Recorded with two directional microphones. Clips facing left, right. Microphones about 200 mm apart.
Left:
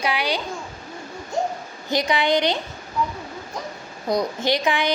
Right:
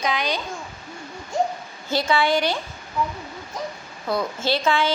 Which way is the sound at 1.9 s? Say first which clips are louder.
Even; 15° left (ahead or behind).